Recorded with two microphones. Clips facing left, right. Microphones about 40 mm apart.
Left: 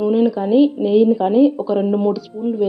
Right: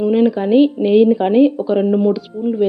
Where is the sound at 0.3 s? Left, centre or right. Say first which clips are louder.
Right 1 dB; right.